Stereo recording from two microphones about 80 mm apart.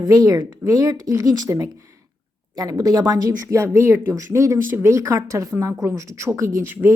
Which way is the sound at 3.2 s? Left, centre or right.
Right.